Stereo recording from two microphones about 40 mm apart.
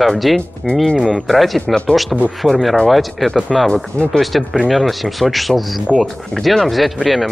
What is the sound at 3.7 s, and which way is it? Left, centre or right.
Speech, left.